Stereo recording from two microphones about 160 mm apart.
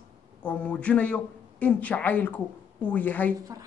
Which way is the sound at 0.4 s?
10° left (ahead or behind).